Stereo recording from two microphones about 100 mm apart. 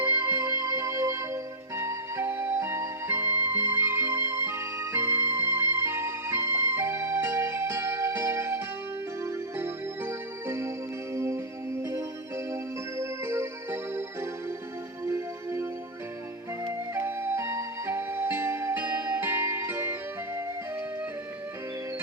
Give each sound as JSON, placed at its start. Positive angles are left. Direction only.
{"t": 0.0, "sound": "music", "side_deg": -20}
{"t": 16.9, "sound": "flute", "side_deg": -25}
{"t": 18.8, "sound": "music", "side_deg": -15}